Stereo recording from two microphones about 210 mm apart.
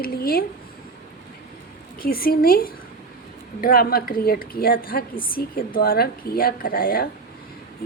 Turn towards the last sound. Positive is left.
turn(degrees=45)  # may be behind; listen again after turning